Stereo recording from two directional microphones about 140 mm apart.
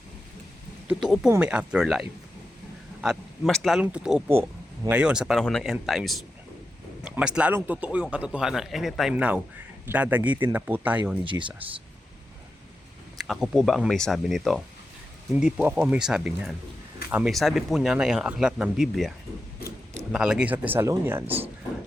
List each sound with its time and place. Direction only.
0.9 s speech: centre (ahead or behind)
11.3 s speech: 35° right (ahead or behind)
13.1 s speech: centre (ahead or behind)
17.3 s speech: centre (ahead or behind)